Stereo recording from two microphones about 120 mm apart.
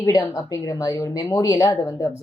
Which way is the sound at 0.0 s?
30° left (ahead or behind).